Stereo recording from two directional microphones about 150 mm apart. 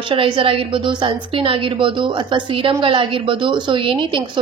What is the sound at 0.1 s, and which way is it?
A woman's voice, 35° right (ahead or behind).